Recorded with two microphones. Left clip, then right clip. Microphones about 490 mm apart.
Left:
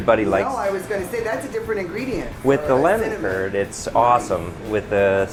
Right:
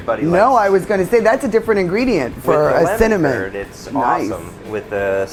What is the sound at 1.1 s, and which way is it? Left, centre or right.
Speech, right.